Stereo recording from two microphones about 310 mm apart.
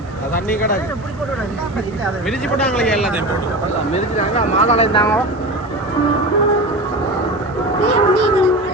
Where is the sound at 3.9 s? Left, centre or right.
Left.